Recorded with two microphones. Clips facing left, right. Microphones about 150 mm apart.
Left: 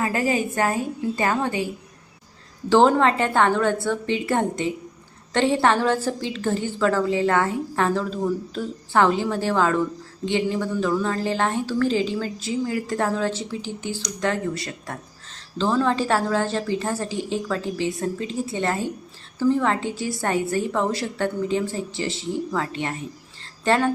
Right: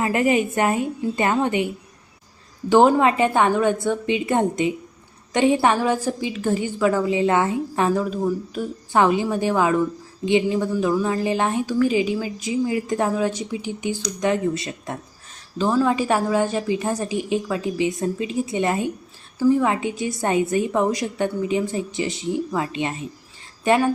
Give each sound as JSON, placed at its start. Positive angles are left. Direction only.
{"t": 0.0, "sound": "a woman's voice", "side_deg": -25}
{"t": 2.6, "sound": "a woman's voice", "side_deg": -15}
{"t": 15.5, "sound": "a woman's voice", "side_deg": -10}